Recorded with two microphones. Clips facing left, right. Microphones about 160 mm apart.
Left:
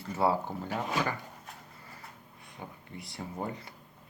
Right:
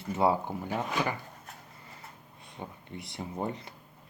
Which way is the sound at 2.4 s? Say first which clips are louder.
Right 3 dB; 20° right (ahead or behind).